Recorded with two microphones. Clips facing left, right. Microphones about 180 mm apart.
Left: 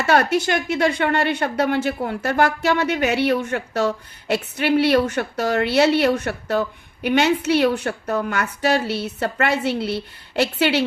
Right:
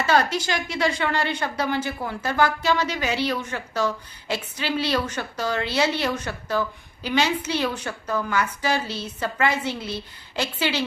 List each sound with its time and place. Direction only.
0.0 s a woman's voice: 60° left (ahead or behind)